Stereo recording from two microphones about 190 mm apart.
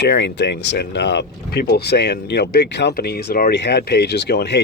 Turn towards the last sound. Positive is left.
turn(degrees=60)  # may be behind; listen again after turning